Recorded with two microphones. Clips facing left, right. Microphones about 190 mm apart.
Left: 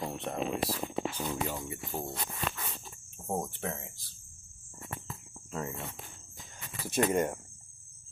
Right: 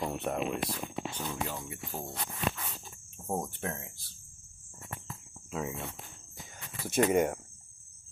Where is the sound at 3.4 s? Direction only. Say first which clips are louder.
Even; centre (ahead or behind).